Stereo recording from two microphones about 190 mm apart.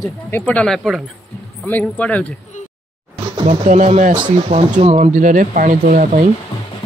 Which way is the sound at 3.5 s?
35° right (ahead or behind).